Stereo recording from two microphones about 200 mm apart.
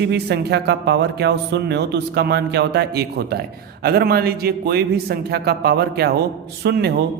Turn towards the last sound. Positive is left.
turn(degrees=-55)  # may be behind; listen again after turning